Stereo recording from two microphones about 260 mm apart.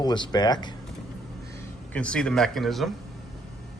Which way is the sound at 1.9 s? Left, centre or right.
Centre.